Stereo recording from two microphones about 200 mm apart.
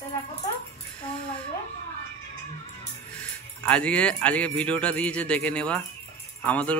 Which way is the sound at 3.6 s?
5° left (ahead or behind).